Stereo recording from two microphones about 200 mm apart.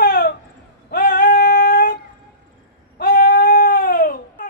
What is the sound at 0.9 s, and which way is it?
Female singing, 45° left (ahead or behind).